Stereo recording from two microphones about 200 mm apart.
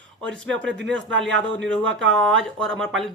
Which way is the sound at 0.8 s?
65° right (ahead or behind).